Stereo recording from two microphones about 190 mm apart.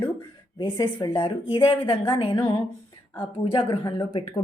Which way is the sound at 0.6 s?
25° left (ahead or behind).